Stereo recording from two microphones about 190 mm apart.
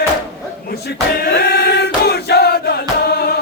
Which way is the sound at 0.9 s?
55° left (ahead or behind).